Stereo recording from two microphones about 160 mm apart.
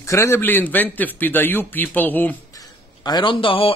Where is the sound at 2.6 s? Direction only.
25° left (ahead or behind).